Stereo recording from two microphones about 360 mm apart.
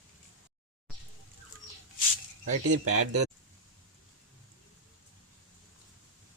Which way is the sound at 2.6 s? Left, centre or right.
Right.